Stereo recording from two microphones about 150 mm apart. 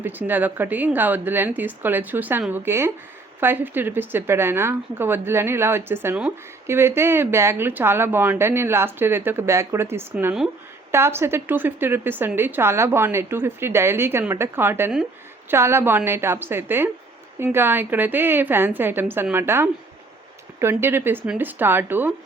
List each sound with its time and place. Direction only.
0.0 s a woman's voice: 15° right (ahead or behind)